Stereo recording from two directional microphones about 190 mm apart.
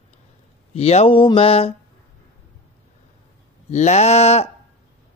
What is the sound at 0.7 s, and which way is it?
Speech, 30° left (ahead or behind).